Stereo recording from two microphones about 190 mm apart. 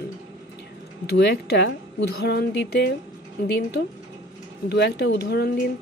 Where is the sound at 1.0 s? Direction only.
60° left (ahead or behind).